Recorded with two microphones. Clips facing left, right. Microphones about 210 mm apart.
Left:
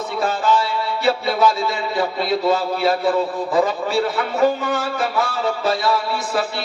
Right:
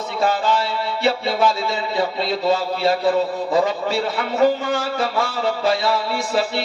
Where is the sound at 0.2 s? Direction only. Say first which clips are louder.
Even; 25° right (ahead or behind).